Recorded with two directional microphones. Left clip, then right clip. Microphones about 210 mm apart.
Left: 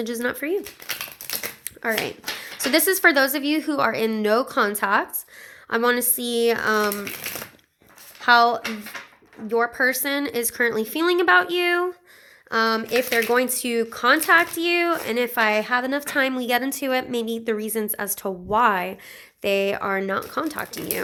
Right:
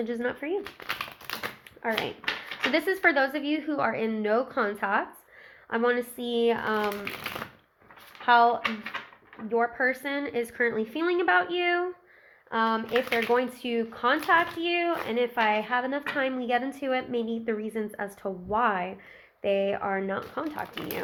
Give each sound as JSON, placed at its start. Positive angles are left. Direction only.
{"t": 0.0, "sound": "speech", "side_deg": 45}
{"t": 0.9, "sound": "dog", "side_deg": 15}
{"t": 1.8, "sound": "speech", "side_deg": 45}
{"t": 8.2, "sound": "a woman's voice", "side_deg": 50}